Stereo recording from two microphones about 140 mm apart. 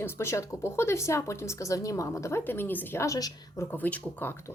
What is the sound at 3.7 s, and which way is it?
Speech, 10° left (ahead or behind).